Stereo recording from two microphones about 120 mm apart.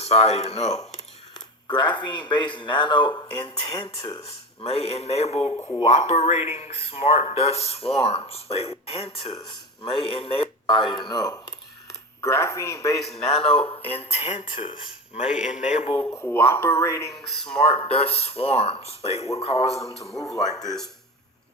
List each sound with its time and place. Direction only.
0.0 s speech: 65° left (ahead or behind)
1.6 s speech: 40° left (ahead or behind)
3.7 s speech: 55° left (ahead or behind)
9.5 s speech: 40° left (ahead or behind)
11.1 s speech: 35° left (ahead or behind)
12.2 s a man's voice: 20° left (ahead or behind)
13.0 s speech: 5° left (ahead or behind)
13.3 s speech: 50° left (ahead or behind)
15.2 s speech: 80° left
16.3 s a man's voice: 15° left (ahead or behind)
17.2 s speech: 5° left (ahead or behind)
17.6 s speech: 50° left (ahead or behind)
20.5 s speech: 30° left (ahead or behind)